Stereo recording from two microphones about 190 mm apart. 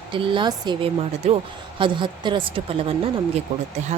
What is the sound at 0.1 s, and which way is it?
Speech, 25° right (ahead or behind).